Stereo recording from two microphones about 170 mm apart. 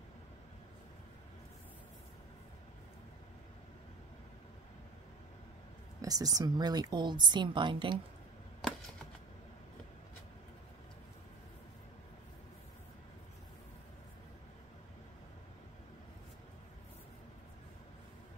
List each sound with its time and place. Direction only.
5.9 s a woman's voice: 20° right (ahead or behind)